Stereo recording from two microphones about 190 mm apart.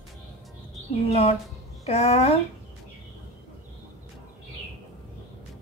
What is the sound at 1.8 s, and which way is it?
Speech, 35° left (ahead or behind).